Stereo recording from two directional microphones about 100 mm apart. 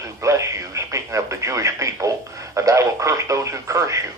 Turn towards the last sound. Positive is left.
turn(degrees=-30)  # may be behind; listen again after turning